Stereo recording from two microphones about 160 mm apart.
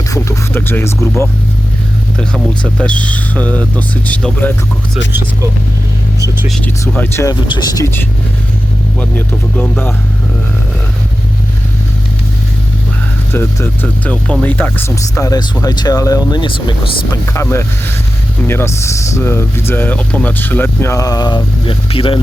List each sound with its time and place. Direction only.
0.1 s speech: 15° left (ahead or behind)
2.6 s speech: 5° left (ahead or behind)
6.1 s vehicle: 20° right (ahead or behind)
6.5 s speech: 10° left (ahead or behind)
7.4 s speech: 30° left (ahead or behind)
9.0 s speech: 10° left (ahead or behind)
13.3 s speech: 15° left (ahead or behind); by 17.2 s 30° left (ahead or behind)
17.2 s speech: 15° left (ahead or behind); by 22.2 s 35° left (ahead or behind)